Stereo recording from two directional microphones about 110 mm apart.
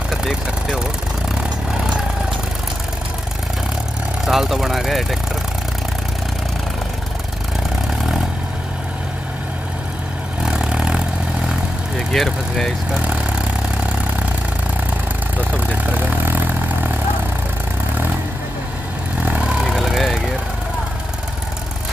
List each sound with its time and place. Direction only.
0.1 s vehicle: 5° right (ahead or behind)
4.3 s vehicle: centre (ahead or behind)
10.4 s vehicle: 5° right (ahead or behind)
12.1 s speech: 5° left (ahead or behind)
13.0 s vehicle: 10° right (ahead or behind)
15.5 s vehicle: 15° right (ahead or behind)
19.2 s vehicle: 15° right (ahead or behind)